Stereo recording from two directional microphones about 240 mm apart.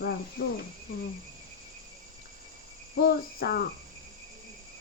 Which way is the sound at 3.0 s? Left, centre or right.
Left.